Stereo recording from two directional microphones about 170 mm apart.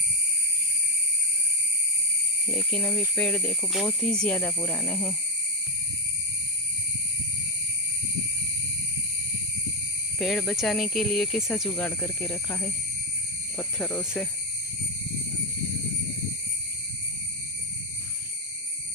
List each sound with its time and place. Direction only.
2.5 s speech: 10° left (ahead or behind)
10.1 s speech: 5° left (ahead or behind)
11.8 s speech: 10° left (ahead or behind)